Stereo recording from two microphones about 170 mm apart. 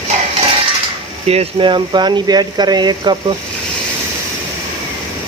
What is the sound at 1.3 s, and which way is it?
Speech, 35° right (ahead or behind).